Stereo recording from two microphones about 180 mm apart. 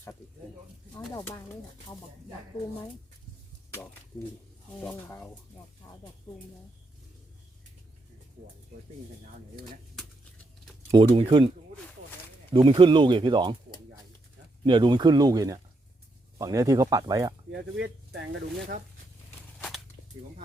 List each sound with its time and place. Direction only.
4.8 s speech: 10° left (ahead or behind)
10.9 s speech: 30° right (ahead or behind)
12.5 s speech: 30° right (ahead or behind)
14.6 s speech: 25° right (ahead or behind)
17.7 s speech: 75° right (ahead or behind)
19.5 s a sound: 5° left (ahead or behind)